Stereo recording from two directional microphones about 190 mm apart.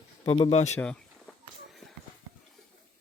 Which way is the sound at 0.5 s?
35° left (ahead or behind).